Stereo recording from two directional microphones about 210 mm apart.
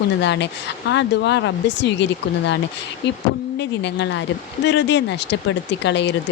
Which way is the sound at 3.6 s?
55° left (ahead or behind).